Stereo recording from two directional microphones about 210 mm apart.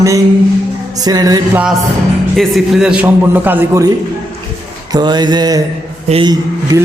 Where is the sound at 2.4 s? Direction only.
Centre (ahead or behind).